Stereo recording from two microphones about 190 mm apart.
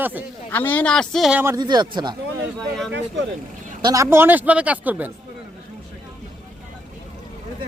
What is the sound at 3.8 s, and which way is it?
Speech, 15° right (ahead or behind).